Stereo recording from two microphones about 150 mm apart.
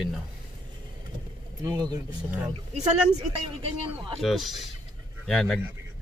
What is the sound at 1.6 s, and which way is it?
Speech, 25° right (ahead or behind).